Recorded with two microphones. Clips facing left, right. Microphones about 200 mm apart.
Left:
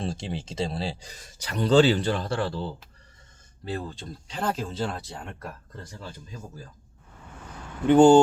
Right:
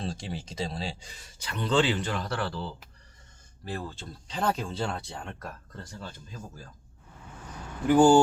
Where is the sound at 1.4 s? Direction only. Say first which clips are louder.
Left 7 dB; 40° left (ahead or behind).